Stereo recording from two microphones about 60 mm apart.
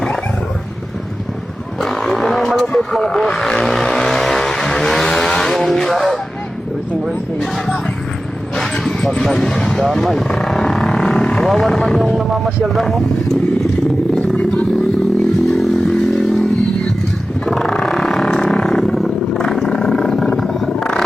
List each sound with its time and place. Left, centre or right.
1.8 s vehicle: centre
8.5 s vehicle: centre
11.4 s speech: centre
14.2 s a sound: left
15.4 s motorcycle: centre
17.4 s roaring cats: centre